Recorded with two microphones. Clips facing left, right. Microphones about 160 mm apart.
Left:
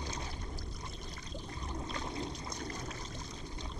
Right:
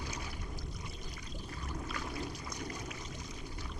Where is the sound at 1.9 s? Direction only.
20° left (ahead or behind).